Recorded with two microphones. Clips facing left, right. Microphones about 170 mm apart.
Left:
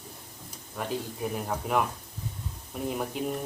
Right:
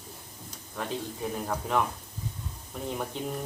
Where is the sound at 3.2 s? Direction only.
10° left (ahead or behind).